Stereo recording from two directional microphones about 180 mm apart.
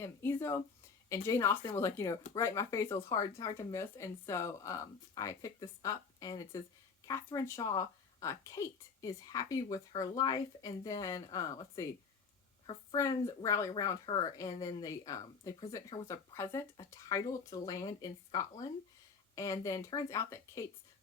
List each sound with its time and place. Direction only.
0.0 s a woman's voice: 15° left (ahead or behind)
19.6 s speech: 20° left (ahead or behind)